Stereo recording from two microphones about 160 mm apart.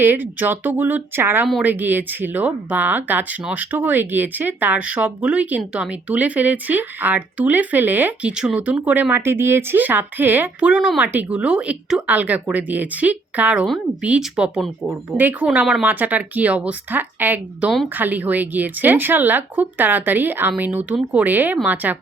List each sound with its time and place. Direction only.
0.0 s speech: 10° right (ahead or behind)